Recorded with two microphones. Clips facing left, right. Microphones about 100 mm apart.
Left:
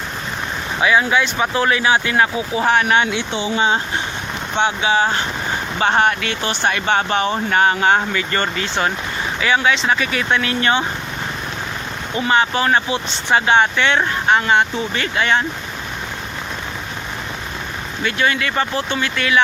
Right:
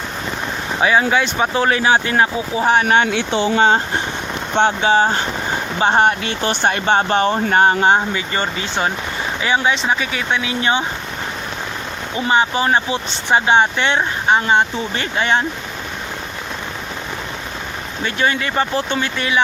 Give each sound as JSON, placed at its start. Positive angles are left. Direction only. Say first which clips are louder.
{"t": 0.8, "sound": "speech", "louder": "right 1 dB", "side_deg": -30}
{"t": 2.8, "sound": "speech", "louder": "right 2 dB", "side_deg": -45}
{"t": 5.8, "sound": "speech", "louder": "right 2 dB", "side_deg": -25}
{"t": 7.9, "sound": "speech", "louder": "even", "side_deg": -20}
{"t": 12.1, "sound": "speech", "louder": "even", "side_deg": -20}
{"t": 18.0, "sound": "speech", "louder": "even", "side_deg": -30}